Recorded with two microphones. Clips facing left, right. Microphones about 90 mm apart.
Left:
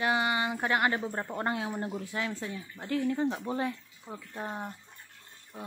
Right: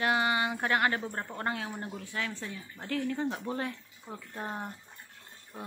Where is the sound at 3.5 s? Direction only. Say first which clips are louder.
Left 3 dB; 5° left (ahead or behind).